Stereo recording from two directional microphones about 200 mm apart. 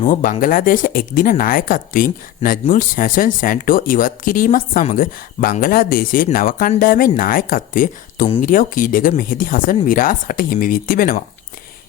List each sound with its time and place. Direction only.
0.1 s speech: 40° left (ahead or behind)